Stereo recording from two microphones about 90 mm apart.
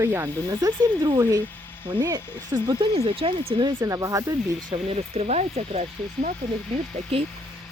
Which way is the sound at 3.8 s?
40° right (ahead or behind).